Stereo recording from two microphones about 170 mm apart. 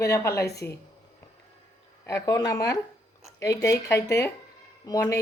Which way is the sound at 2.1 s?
20° left (ahead or behind).